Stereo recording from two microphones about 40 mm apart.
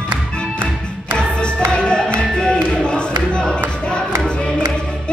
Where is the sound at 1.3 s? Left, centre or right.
Left.